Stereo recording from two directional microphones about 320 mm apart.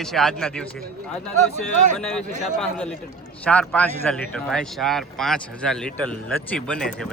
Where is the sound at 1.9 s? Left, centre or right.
Centre.